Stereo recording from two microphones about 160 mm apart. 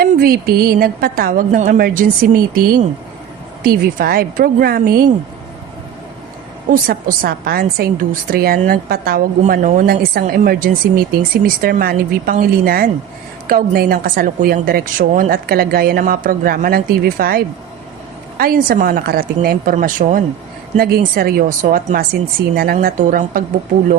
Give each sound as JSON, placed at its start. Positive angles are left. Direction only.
{"t": 0.0, "sound": "a woman's voice", "side_deg": -65}
{"t": 6.7, "sound": "a woman's voice", "side_deg": -65}
{"t": 19.7, "sound": "speech", "side_deg": -55}
{"t": 20.7, "sound": "a woman's voice", "side_deg": -70}